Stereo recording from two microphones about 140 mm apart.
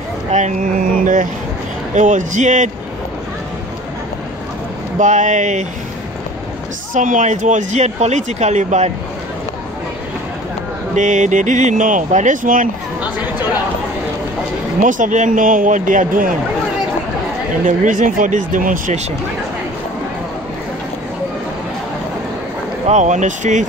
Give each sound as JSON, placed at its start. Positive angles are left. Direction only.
{"t": 0.3, "sound": "speech", "side_deg": -65}
{"t": 4.9, "sound": "speech", "side_deg": -60}
{"t": 6.9, "sound": "speech", "side_deg": -65}
{"t": 11.0, "sound": "speech", "side_deg": -60}
{"t": 14.8, "sound": "a man's voice", "side_deg": -65}
{"t": 17.6, "sound": "a man's voice", "side_deg": -65}
{"t": 22.8, "sound": "speech", "side_deg": -55}